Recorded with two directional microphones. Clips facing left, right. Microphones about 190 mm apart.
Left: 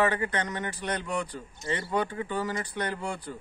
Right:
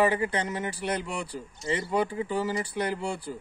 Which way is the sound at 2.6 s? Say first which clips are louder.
Right 3 dB; 10° right (ahead or behind).